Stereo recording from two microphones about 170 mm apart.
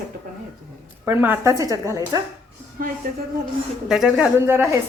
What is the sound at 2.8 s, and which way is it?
Speech, 55° right (ahead or behind).